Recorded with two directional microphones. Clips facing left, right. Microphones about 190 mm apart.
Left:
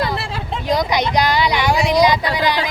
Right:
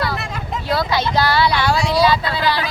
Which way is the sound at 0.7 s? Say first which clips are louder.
Left 2 dB; 15° left (ahead or behind).